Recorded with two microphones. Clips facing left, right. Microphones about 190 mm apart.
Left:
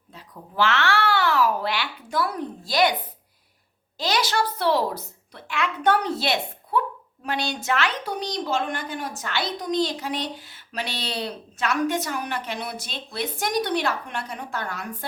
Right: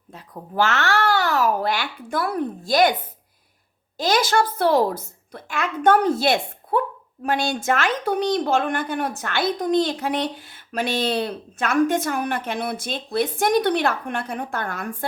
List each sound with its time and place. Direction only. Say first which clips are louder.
0.1 s babbling: right 6 dB; 45° right (ahead or behind)
3.9 s a woman's voice: right 5 dB; 50° right (ahead or behind)